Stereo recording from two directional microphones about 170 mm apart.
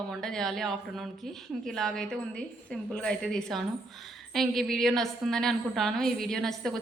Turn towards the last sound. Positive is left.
turn(degrees=0)  # may be behind; listen again after turning